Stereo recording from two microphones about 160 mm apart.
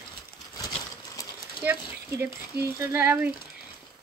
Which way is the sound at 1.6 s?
15° right (ahead or behind).